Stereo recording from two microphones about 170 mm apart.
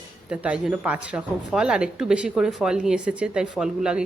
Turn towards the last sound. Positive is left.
turn(degrees=-5)  # may be behind; listen again after turning